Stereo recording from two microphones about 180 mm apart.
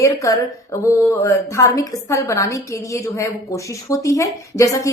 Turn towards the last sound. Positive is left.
turn(degrees=15)  # may be behind; listen again after turning